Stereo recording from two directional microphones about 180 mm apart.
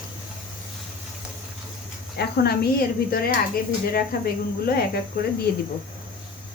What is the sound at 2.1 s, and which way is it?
Speech, 60° left (ahead or behind).